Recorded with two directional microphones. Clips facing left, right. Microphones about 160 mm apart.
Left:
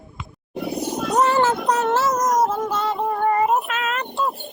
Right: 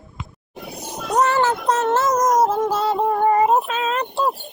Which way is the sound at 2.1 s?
20° right (ahead or behind).